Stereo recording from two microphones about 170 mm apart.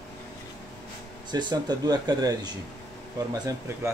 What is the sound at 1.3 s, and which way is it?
Speech, 25° right (ahead or behind).